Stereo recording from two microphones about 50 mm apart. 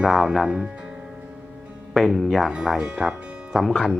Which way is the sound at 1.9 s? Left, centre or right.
Centre.